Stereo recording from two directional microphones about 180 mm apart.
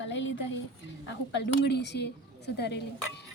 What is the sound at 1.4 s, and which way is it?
A woman's voice, 70° left (ahead or behind).